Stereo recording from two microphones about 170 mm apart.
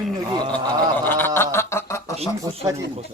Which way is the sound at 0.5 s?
10° left (ahead or behind).